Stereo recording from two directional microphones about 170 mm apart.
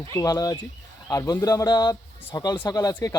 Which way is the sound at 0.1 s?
20° left (ahead or behind).